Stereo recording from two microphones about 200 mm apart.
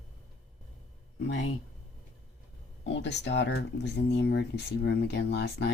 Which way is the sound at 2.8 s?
60° left (ahead or behind).